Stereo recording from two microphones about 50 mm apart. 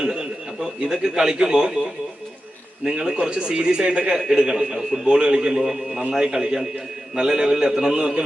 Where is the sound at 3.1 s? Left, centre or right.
Centre.